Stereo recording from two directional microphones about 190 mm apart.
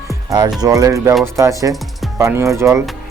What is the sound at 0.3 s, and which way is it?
Speech, 20° right (ahead or behind).